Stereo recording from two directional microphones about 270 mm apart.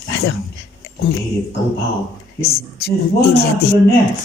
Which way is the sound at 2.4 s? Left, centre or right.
Left.